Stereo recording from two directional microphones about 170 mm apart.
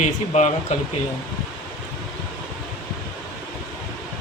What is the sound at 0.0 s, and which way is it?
Speech, 40° left (ahead or behind).